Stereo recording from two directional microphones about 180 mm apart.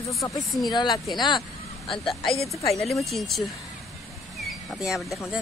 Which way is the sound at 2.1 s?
Centre (ahead or behind).